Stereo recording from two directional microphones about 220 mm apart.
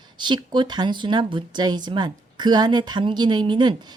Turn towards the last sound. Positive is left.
turn(degrees=-20)  # may be behind; listen again after turning